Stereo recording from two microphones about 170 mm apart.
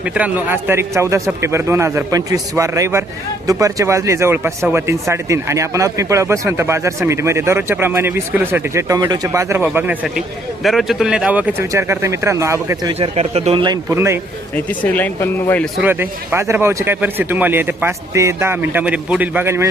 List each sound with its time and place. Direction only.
0.0 s speech: 10° right (ahead or behind)
12.9 s speech: 40° right (ahead or behind)
13.9 s speech: 15° right (ahead or behind)
14.5 s speech: 10° left (ahead or behind)
15.8 s speech: 10° right (ahead or behind)